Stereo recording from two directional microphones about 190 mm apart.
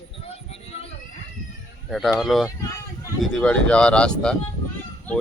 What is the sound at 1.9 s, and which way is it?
Speech, centre (ahead or behind).